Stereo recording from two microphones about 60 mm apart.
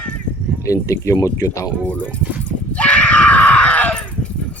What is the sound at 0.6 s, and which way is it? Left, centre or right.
Speech, left.